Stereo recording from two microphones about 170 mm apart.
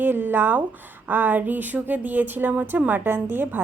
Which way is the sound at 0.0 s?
10° right (ahead or behind).